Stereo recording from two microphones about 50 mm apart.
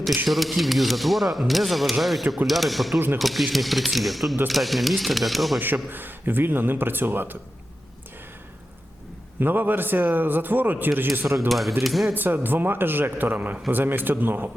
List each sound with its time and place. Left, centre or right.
0.3 s speech: centre
5.5 s a man's voice: right
9.4 s a man's voice: right
11.3 s speech: centre
12.1 s a man's voice: right